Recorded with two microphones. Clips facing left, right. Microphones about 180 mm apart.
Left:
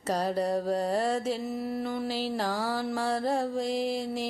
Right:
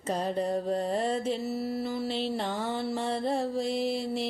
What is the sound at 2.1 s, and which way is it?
Mantra, 5° left (ahead or behind).